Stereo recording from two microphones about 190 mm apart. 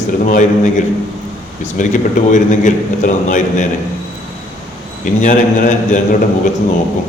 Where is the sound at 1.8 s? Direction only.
40° left (ahead or behind).